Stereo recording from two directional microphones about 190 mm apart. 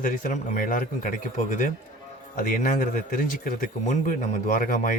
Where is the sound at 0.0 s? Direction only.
45° left (ahead or behind).